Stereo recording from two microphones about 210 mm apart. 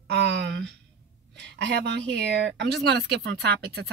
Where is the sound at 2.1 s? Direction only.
55° right (ahead or behind).